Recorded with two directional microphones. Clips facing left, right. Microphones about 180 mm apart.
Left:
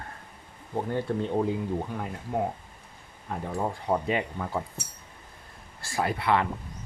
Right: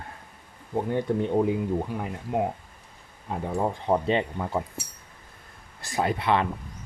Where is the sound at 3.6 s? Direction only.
25° right (ahead or behind).